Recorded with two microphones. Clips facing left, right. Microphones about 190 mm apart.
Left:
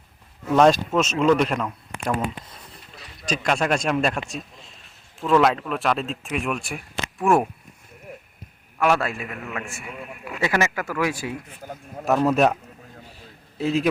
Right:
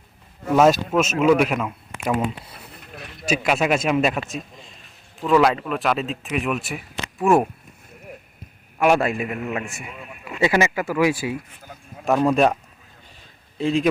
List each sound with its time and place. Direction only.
0.5 s speech: 5° right (ahead or behind)
2.8 s a sound: 55° right (ahead or behind)
3.2 s speech: 5° right (ahead or behind)
8.8 s speech: 15° right (ahead or behind)
11.6 s speech: 50° left (ahead or behind)
12.0 s speech: 5° left (ahead or behind)
13.6 s speech: 5° left (ahead or behind)